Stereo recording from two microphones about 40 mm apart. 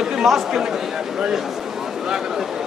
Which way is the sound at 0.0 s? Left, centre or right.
Centre.